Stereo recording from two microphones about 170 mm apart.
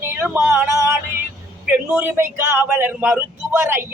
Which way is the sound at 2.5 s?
10° right (ahead or behind).